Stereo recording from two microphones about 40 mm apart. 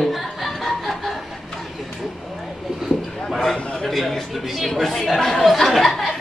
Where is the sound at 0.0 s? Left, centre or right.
Centre.